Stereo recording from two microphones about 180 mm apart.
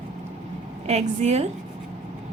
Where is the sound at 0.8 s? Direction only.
40° right (ahead or behind).